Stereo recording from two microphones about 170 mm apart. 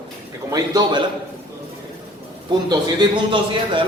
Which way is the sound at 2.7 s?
30° right (ahead or behind).